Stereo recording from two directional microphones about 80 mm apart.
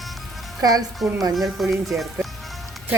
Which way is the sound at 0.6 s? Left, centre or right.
Right.